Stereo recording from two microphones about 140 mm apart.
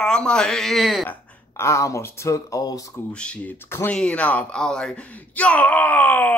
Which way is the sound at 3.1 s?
5° left (ahead or behind).